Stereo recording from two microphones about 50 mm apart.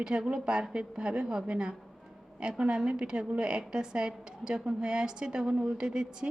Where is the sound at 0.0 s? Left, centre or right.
Centre.